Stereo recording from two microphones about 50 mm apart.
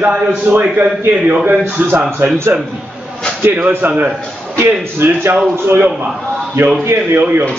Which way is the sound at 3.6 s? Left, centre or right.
Right.